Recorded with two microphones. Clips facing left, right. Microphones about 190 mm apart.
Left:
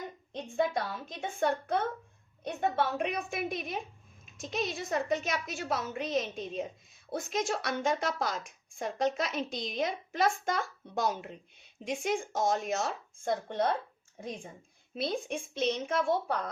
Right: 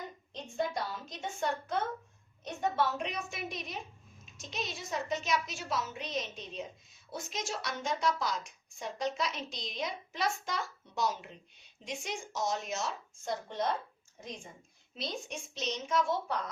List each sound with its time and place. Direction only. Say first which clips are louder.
0.3 s a woman's voice: left 4 dB; 55° left (ahead or behind)